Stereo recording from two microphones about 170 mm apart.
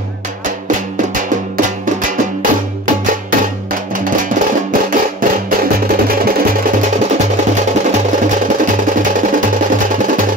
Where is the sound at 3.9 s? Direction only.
50° right (ahead or behind).